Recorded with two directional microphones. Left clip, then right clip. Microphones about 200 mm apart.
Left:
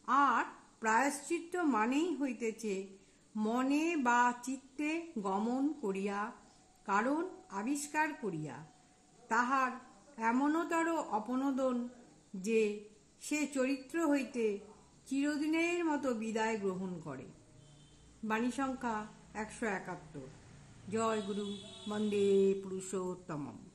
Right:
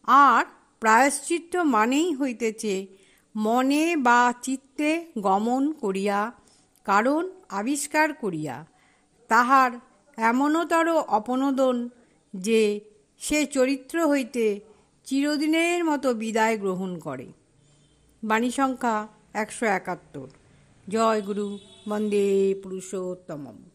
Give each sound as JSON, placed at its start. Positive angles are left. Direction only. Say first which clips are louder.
{"t": 0.0, "sound": "a woman's voice", "louder": "right 13 dB", "side_deg": -40}